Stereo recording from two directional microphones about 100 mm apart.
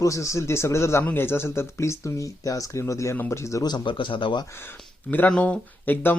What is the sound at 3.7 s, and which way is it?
Speech, 55° left (ahead or behind).